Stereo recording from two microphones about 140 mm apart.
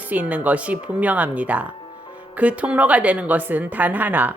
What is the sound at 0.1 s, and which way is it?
A woman's voice, 10° right (ahead or behind).